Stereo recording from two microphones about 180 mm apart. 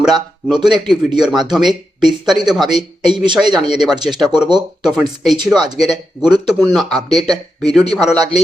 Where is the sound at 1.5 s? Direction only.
Centre (ahead or behind).